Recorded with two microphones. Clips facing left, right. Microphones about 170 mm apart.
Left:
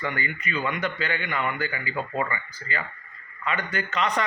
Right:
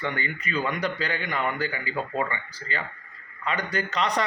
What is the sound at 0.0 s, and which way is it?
A man's voice, 30° right (ahead or behind).